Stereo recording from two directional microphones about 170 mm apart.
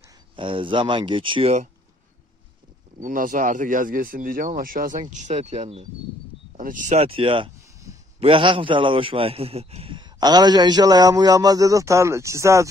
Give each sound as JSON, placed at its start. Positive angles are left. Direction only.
{"t": 0.4, "sound": "a man's voice", "side_deg": -30}
{"t": 3.0, "sound": "speech", "side_deg": -50}
{"t": 5.1, "sound": "speech", "side_deg": -45}
{"t": 6.5, "sound": "speech", "side_deg": -50}
{"t": 7.6, "sound": "a sound", "side_deg": -20}
{"t": 8.2, "sound": "a man's voice", "side_deg": -30}